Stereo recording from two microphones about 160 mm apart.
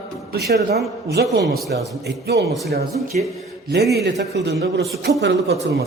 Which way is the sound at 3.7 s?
85° right.